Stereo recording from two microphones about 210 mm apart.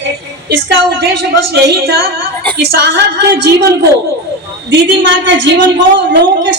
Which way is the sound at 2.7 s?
50° right (ahead or behind).